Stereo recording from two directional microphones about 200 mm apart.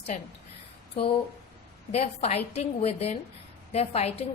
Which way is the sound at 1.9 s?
30° left (ahead or behind).